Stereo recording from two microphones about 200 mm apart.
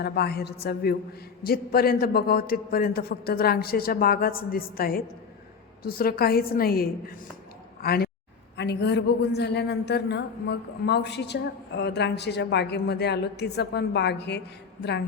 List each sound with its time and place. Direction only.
0.0 s a man's voice: 55° left (ahead or behind)
7.8 s a sound: 50° left (ahead or behind)
8.5 s a man's voice: 55° left (ahead or behind)